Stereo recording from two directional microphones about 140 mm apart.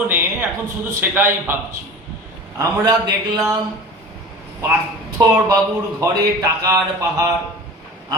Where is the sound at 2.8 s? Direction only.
25° right (ahead or behind).